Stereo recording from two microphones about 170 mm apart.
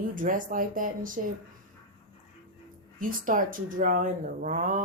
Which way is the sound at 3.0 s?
55° right (ahead or behind).